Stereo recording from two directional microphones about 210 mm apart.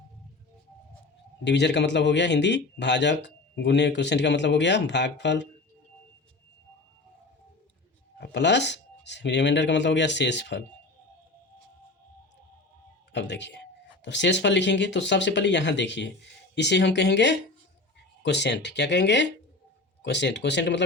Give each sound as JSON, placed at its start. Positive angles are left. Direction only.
{"t": 1.5, "sound": "speech", "side_deg": 55}
{"t": 8.2, "sound": "speech", "side_deg": 55}
{"t": 13.1, "sound": "speech", "side_deg": 60}